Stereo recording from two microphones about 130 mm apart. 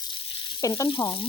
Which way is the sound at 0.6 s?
25° left (ahead or behind).